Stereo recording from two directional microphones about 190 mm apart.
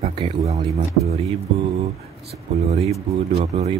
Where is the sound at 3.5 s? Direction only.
30° right (ahead or behind).